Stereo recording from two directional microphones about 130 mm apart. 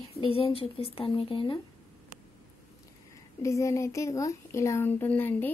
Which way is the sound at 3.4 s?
25° left (ahead or behind).